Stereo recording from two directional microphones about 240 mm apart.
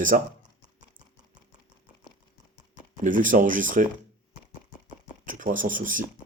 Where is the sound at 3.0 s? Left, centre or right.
Right.